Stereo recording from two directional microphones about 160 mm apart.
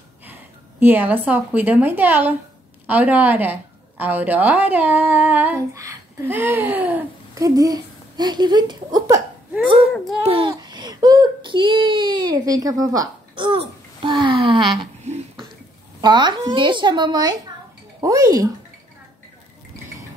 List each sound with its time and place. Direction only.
0.2 s a woman's voice: 10° right (ahead or behind)
9.8 s a child's voice: centre (ahead or behind)
10.2 s speech: 35° right (ahead or behind)
15.1 s a sound: 45° right (ahead or behind)
16.0 s a woman's voice: 30° right (ahead or behind)